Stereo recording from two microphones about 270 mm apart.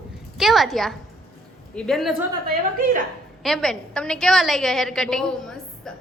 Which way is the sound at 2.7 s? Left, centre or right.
Right.